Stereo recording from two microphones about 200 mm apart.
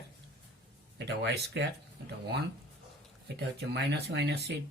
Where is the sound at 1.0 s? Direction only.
60° right (ahead or behind).